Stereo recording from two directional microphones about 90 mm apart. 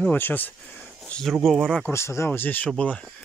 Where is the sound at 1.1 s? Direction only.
10° left (ahead or behind).